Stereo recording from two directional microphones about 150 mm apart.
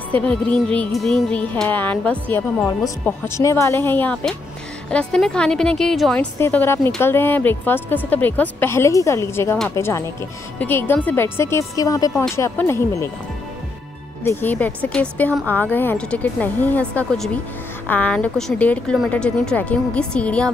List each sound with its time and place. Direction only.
0.1 s a woman's voice: 10° left (ahead or behind)
6.3 s a woman's voice: 15° left (ahead or behind)
14.2 s a woman's voice: 10° left (ahead or behind)